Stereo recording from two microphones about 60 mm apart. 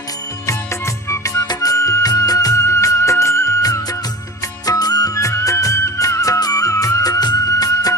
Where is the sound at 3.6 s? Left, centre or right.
Left.